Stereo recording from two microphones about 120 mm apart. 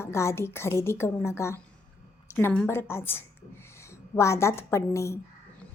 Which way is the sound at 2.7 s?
20° left (ahead or behind).